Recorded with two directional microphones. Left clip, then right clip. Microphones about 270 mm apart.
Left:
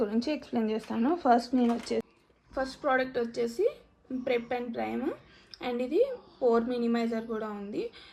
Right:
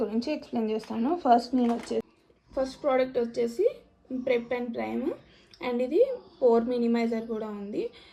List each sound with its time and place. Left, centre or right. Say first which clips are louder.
0.0 s speech: even; centre
1.9 s a woman's voice: right 1 dB; centre